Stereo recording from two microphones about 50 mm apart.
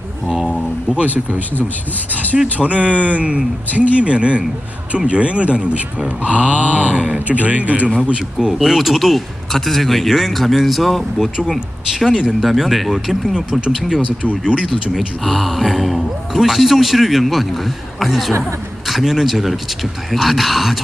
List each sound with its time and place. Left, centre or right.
0.3 s a sound: centre
0.9 s a sound: right
2.6 s speech: right
7.9 s speech: centre
8.5 s a man's voice: centre
12.0 s a man's voice: centre
13.3 s speech: centre
14.9 s a man's voice: centre